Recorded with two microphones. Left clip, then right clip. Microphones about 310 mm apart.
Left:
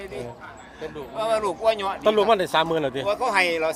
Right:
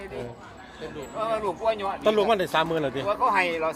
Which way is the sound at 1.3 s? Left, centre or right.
Left.